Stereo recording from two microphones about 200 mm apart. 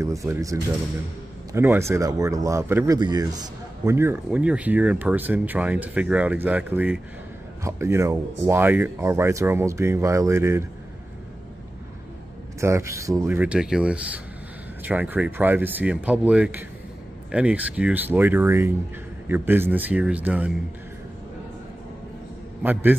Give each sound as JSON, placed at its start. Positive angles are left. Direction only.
{"t": 0.0, "sound": "speech", "side_deg": -15}
{"t": 12.5, "sound": "speech", "side_deg": -15}
{"t": 22.6, "sound": "speech", "side_deg": -10}